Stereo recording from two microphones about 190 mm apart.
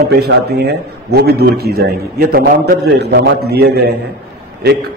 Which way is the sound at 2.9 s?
60° right (ahead or behind).